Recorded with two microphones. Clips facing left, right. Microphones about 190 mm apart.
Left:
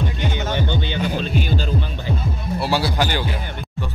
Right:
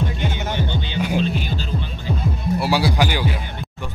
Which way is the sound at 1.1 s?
45° left (ahead or behind).